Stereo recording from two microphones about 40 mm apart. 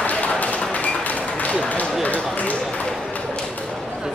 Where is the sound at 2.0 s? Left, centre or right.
Left.